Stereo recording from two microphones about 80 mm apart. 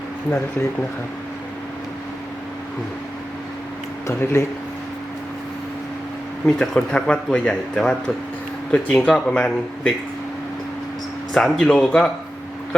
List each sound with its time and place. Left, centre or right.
4.0 s speech: left
6.4 s speech: centre
11.3 s speech: centre